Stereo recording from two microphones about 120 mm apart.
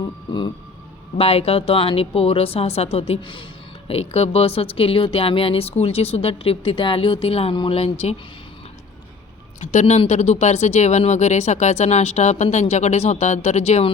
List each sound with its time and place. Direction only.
0.0 s music: 40° left (ahead or behind)
1.2 s speech: 55° left (ahead or behind)
3.2 s speech: 45° left (ahead or behind)
3.8 s speech: 55° left (ahead or behind)
7.5 s music: 40° left (ahead or behind)
7.8 s speech: 60° left (ahead or behind)
9.6 s speech: 75° left (ahead or behind)
10.1 s speech: 65° left (ahead or behind)